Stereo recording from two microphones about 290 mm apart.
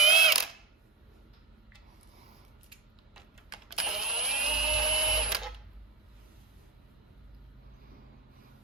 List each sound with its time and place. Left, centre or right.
0.0 s mechanisms: centre
3.8 s sewing machine: centre